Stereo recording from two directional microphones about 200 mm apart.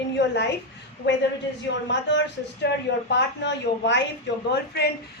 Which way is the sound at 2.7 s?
55° left (ahead or behind).